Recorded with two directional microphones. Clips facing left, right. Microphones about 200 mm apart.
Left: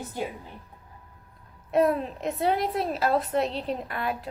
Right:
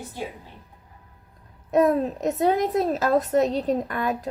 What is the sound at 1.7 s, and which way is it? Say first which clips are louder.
Speech: right 3 dB; 45° right (ahead or behind).